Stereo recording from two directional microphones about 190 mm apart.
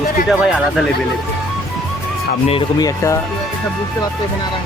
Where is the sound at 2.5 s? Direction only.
20° left (ahead or behind).